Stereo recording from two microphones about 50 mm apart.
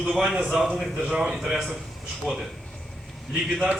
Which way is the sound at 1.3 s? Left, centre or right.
Centre.